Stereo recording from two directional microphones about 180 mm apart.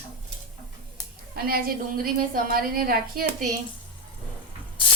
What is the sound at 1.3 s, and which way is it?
A woman's voice, 55° right (ahead or behind).